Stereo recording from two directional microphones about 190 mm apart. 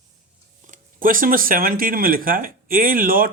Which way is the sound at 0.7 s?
45° right (ahead or behind).